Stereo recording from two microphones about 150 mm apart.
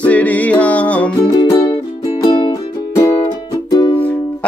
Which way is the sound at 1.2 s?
25° left (ahead or behind).